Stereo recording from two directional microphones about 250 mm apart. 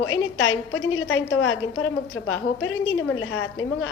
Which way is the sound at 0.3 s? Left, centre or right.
Left.